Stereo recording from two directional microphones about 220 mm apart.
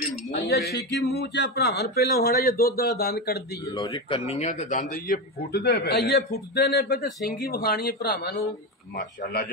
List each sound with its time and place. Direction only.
0.3 s a man's voice: 45° left (ahead or behind)
3.7 s a man's voice: 20° left (ahead or behind); by 9.5 s 45° left (ahead or behind)